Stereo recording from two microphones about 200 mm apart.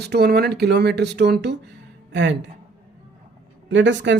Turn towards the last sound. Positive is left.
turn(degrees=-60)  # may be behind; listen again after turning